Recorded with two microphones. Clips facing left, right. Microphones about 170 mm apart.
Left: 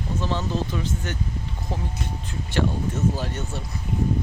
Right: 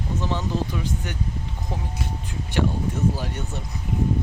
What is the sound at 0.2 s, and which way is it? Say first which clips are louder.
Speech: even; 15° right (ahead or behind).